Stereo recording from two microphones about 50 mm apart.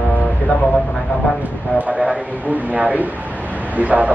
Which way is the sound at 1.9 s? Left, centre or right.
Right.